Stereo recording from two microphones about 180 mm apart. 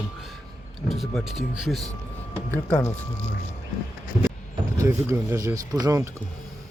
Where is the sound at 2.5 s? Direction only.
15° left (ahead or behind).